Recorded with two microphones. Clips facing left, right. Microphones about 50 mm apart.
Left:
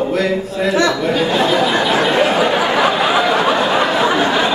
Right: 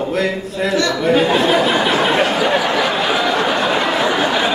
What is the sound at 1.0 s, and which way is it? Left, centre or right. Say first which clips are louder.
Speech: right 1 dB; centre.